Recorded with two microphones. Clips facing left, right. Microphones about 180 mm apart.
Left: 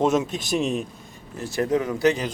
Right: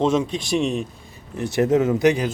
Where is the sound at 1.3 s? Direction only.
20° right (ahead or behind).